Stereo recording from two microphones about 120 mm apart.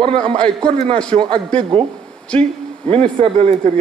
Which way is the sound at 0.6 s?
50° right (ahead or behind).